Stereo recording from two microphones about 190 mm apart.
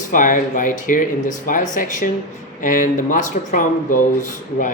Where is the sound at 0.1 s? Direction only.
45° left (ahead or behind).